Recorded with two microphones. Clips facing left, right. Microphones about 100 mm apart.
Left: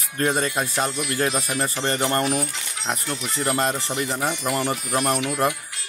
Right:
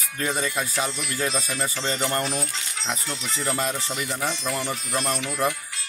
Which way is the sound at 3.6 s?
50° left (ahead or behind).